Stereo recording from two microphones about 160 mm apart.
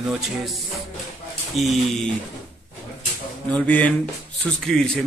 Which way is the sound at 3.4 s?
10° left (ahead or behind).